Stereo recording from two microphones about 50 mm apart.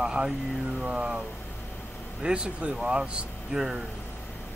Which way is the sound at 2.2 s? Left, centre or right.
Centre.